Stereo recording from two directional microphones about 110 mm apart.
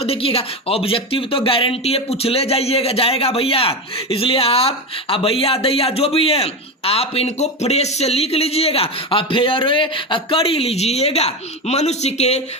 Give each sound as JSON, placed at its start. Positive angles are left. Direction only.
{"t": 0.0, "sound": "speech", "side_deg": 60}